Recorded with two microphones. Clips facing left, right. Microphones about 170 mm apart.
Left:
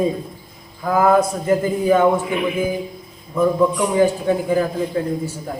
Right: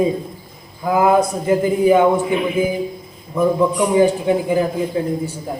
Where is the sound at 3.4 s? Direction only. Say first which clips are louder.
Right 1 dB; 15° right (ahead or behind).